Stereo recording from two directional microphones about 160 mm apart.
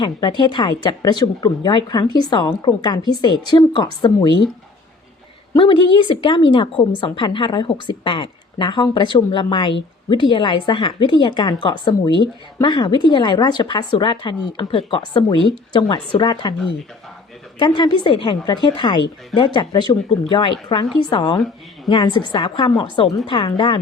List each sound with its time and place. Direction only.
0.0 s speech: 25° left (ahead or behind)
5.5 s a woman's voice: 30° left (ahead or behind)
17.6 s a woman's voice: 25° left (ahead or behind)